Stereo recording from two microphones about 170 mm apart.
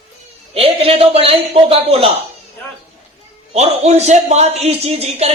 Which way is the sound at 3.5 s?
40° right (ahead or behind).